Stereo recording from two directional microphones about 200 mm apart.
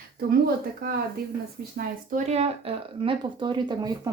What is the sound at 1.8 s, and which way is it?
Speech, 40° right (ahead or behind).